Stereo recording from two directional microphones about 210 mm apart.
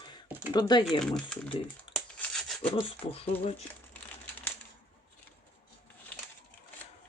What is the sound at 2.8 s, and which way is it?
Speech, 25° left (ahead or behind).